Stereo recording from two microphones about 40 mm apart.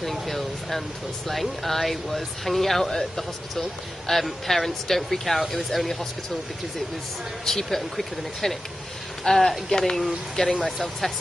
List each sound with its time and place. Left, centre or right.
0.0 s speech: centre
7.4 s speech: centre
10.8 s speech: centre